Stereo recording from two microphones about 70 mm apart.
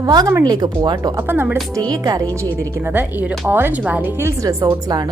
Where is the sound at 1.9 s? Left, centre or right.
Right.